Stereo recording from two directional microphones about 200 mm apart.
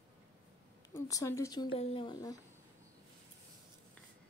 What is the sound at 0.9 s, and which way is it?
Speech, 15° left (ahead or behind).